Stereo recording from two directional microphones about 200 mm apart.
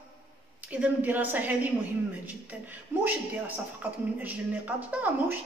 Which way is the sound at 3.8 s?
10° right (ahead or behind).